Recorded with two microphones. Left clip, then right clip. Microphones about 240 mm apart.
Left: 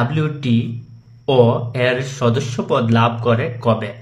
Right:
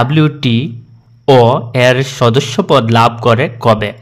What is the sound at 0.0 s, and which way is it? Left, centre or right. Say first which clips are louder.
Speech: right 9 dB; right.